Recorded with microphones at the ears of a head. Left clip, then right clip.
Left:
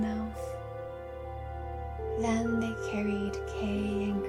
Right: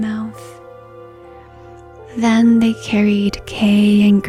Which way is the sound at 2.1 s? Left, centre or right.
Right.